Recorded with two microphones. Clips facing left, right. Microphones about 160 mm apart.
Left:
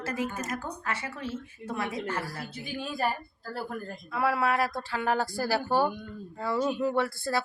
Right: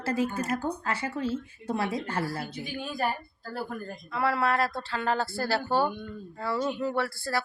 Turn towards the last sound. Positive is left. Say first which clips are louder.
# left 1 dB
turn(degrees=20)  # may be behind; listen again after turning